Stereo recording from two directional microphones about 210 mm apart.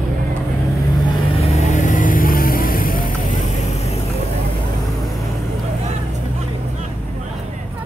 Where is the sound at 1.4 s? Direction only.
30° left (ahead or behind).